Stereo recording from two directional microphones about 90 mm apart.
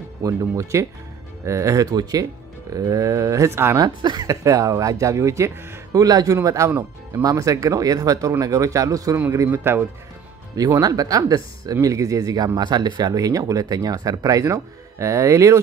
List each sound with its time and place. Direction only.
0.2 s speech: 40° right (ahead or behind)
3.7 s speech: 55° right (ahead or behind)
4.3 s speech: 40° right (ahead or behind)
9.5 s speech: 25° right (ahead or behind)
10.5 s speech: 40° right (ahead or behind)